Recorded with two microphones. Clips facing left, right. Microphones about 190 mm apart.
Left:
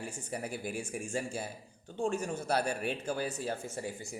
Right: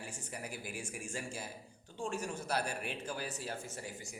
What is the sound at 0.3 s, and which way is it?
Speech, 30° left (ahead or behind).